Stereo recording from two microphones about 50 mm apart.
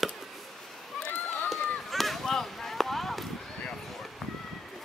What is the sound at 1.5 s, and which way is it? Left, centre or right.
Chop, centre.